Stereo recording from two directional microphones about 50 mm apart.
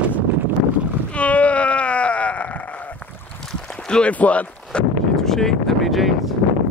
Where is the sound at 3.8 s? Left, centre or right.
Centre.